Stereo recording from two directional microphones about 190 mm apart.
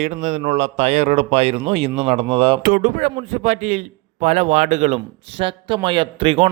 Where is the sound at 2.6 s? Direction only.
45° right (ahead or behind).